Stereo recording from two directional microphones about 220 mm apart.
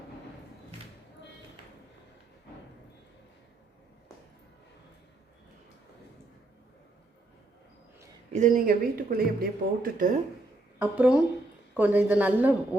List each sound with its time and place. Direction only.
8.3 s speech: 35° right (ahead or behind)
10.8 s speech: 5° right (ahead or behind)